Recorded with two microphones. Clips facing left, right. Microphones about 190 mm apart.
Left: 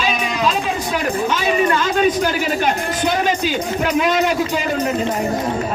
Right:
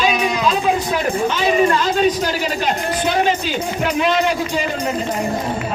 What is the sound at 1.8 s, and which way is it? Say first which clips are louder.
Speech: even; 50° left (ahead or behind).